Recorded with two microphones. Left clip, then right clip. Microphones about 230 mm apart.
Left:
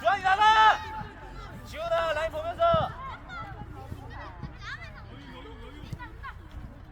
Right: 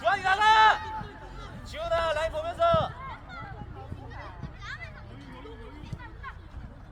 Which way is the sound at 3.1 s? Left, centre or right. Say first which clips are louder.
Left 2 dB; left.